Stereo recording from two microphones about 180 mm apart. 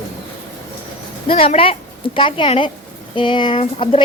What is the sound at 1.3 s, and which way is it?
A woman's voice, 30° left (ahead or behind).